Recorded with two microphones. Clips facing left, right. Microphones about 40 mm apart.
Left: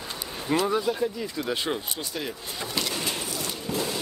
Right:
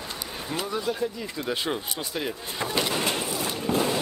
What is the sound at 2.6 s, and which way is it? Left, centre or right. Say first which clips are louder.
Vehicle: right 4 dB; right.